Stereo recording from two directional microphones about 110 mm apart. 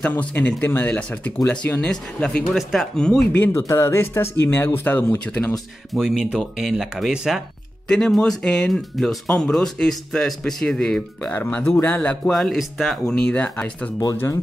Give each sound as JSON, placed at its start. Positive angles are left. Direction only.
{"t": 0.0, "sound": "speech", "side_deg": 15}
{"t": 3.3, "sound": "speech", "side_deg": 20}
{"t": 5.9, "sound": "speech", "side_deg": -5}
{"t": 12.3, "sound": "speech", "side_deg": 5}
{"t": 14.1, "sound": "speech", "side_deg": 25}